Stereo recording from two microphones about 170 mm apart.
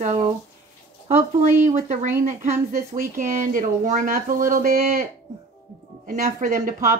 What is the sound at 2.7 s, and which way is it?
Speech, 60° right (ahead or behind).